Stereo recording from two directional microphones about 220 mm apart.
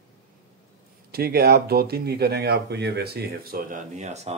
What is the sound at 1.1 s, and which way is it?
Speech, 45° right (ahead or behind).